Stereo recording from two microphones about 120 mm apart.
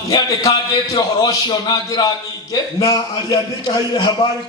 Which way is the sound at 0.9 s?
30° left (ahead or behind).